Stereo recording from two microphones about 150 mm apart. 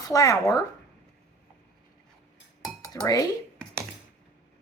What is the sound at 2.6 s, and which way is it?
Chink, 25° left (ahead or behind).